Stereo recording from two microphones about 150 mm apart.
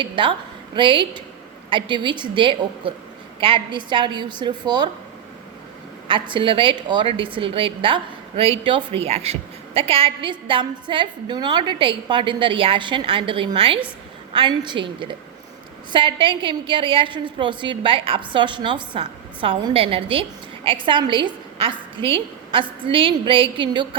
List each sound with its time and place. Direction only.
0.0 s a woman's voice: 35° right (ahead or behind)
6.1 s a woman's voice: 35° right (ahead or behind)